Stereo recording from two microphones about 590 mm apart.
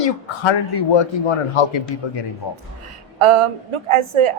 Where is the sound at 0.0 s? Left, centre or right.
Left.